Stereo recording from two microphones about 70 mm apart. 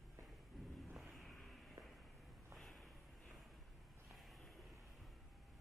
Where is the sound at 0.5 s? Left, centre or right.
Centre.